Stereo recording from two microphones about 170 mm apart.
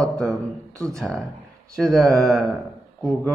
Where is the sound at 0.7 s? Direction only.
20° right (ahead or behind).